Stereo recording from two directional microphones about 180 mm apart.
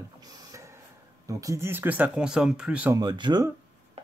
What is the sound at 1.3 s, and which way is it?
Speech, 20° right (ahead or behind).